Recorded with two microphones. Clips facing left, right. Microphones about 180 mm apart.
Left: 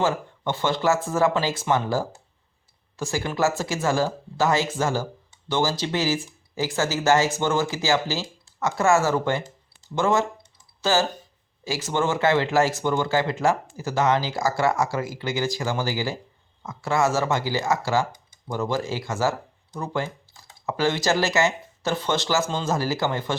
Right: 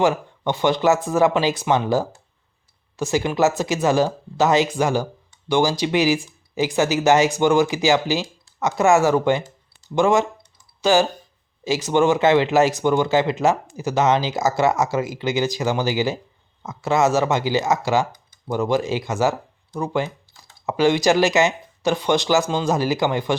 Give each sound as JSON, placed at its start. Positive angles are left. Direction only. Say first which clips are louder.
{"t": 0.0, "sound": "speech", "louder": "right 5 dB", "side_deg": -15}
{"t": 10.8, "sound": "typing", "louder": "right 5 dB", "side_deg": -15}
{"t": 11.6, "sound": "speech", "louder": "right 7 dB", "side_deg": -20}